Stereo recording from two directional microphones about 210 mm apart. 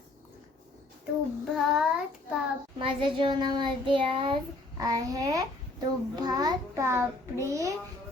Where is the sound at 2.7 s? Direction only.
25° right (ahead or behind).